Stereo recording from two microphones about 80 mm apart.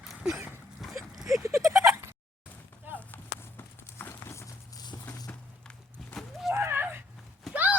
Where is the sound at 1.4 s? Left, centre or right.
Right.